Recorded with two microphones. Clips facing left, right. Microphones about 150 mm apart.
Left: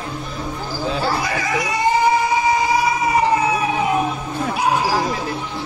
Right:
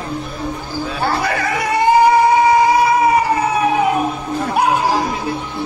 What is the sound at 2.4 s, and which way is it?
Music, 60° right (ahead or behind).